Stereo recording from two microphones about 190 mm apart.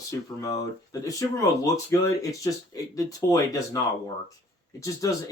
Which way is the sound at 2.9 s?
20° left (ahead or behind).